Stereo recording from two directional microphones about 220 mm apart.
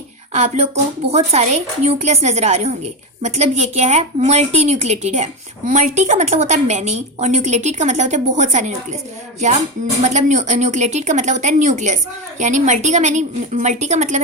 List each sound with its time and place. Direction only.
0.3 s a woman's voice: 30° right (ahead or behind)
10.0 s a woman's voice: 30° right (ahead or behind)